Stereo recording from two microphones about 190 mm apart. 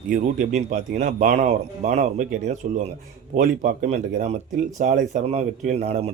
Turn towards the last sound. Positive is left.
turn(degrees=-35)  # may be behind; listen again after turning